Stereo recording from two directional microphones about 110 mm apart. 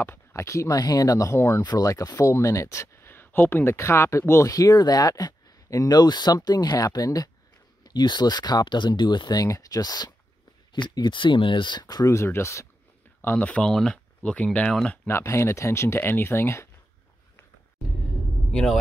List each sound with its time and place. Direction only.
0.0 s speech: 25° left (ahead or behind); by 15.0 s 10° left (ahead or behind)
15.0 s speech: 25° left (ahead or behind)
18.5 s speech: 5° left (ahead or behind)